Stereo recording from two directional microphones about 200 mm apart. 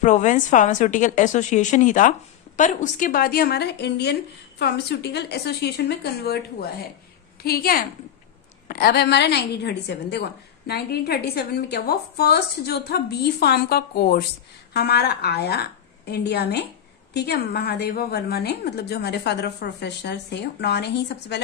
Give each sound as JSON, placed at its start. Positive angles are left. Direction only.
{"t": 0.0, "sound": "a woman's voice", "side_deg": 40}